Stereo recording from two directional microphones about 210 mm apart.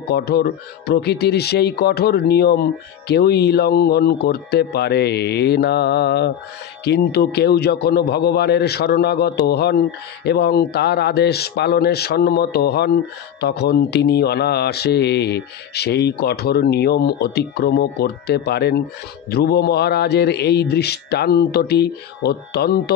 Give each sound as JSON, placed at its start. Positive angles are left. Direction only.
{"t": 0.1, "sound": "a man's voice", "side_deg": 50}